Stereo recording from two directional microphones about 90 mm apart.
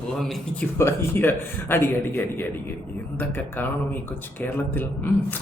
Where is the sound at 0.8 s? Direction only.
25° left (ahead or behind).